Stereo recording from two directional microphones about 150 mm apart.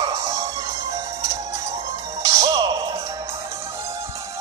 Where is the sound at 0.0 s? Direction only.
25° right (ahead or behind).